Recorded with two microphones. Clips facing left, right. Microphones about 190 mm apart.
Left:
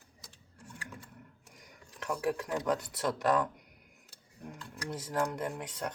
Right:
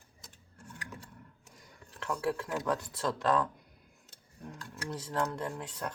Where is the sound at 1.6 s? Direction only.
15° left (ahead or behind).